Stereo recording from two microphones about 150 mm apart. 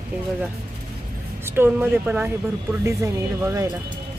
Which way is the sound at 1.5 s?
15° right (ahead or behind).